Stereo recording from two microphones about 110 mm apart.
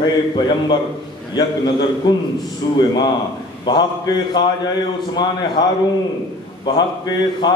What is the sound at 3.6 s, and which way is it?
Speech, 40° left (ahead or behind).